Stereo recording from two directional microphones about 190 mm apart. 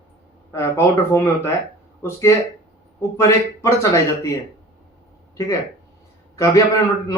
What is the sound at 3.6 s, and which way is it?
Speech, 15° left (ahead or behind).